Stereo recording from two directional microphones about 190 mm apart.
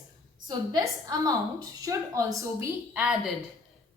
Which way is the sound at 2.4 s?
10° right (ahead or behind).